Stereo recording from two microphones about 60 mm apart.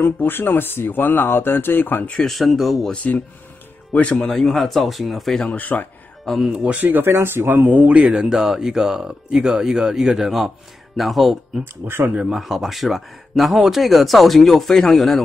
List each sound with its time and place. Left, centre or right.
0.0 s speech: left
2.2 s speech: centre
2.9 s speech: left
4.1 s speech: centre
5.5 s speech: left
6.2 s speech: centre
6.5 s speech: right; by 11.6 s centre
11.6 s speech: right
12.1 s speech: centre
12.4 s speech: centre